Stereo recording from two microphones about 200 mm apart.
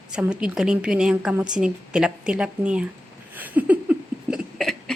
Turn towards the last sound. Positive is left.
turn(degrees=0)  # may be behind; listen again after turning